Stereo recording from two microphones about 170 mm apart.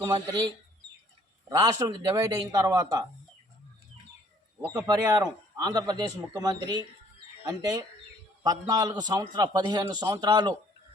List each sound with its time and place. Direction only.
0.0 s a man's voice: 25° right (ahead or behind)
4.7 s a man's voice: 20° right (ahead or behind)